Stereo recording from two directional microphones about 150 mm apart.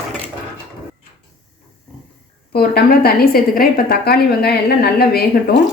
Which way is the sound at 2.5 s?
90° left.